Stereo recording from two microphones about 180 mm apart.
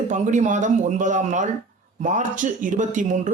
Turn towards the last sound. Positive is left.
turn(degrees=-45)  # may be behind; listen again after turning